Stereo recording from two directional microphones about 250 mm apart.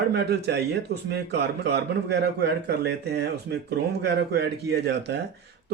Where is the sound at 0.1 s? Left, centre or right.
Right.